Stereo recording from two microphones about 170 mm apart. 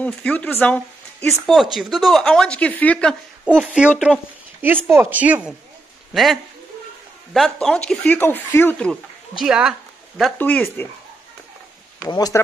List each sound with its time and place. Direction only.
0.0 s speech: 10° left (ahead or behind)
1.5 s speech: centre (ahead or behind)
3.4 s speech: 5° right (ahead or behind)
7.6 s speech: 5° left (ahead or behind)
9.4 s speech: 5° right (ahead or behind)
10.3 s speech: 10° left (ahead or behind)
12.1 s speech: 20° left (ahead or behind)